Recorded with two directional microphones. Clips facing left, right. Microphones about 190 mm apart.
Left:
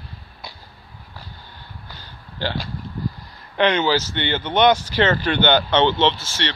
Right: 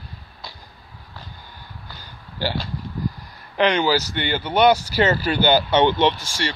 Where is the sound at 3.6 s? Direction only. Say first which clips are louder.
Even; 10° right (ahead or behind).